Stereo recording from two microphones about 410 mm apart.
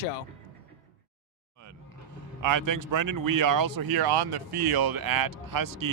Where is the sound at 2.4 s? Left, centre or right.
Right.